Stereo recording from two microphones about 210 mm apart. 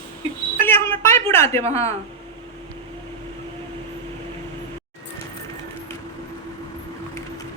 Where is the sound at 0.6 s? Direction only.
10° left (ahead or behind).